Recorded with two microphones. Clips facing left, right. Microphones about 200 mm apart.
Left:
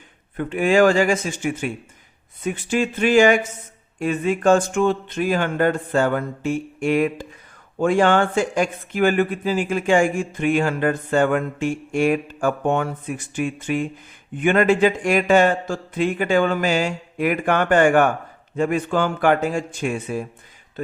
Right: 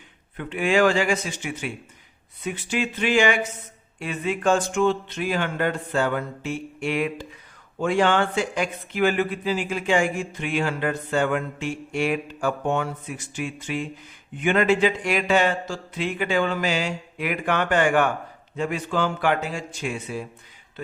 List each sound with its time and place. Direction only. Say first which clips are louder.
0.3 s speech: left 4 dB; 45° left (ahead or behind)